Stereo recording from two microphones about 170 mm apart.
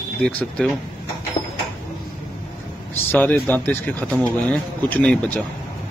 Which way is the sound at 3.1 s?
5° left (ahead or behind).